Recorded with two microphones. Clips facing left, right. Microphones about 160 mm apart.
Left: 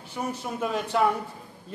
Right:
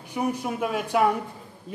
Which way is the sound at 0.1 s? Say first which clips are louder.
Right 5 dB; 10° right (ahead or behind).